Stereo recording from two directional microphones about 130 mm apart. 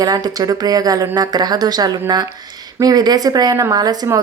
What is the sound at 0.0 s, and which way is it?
Speech, 30° right (ahead or behind).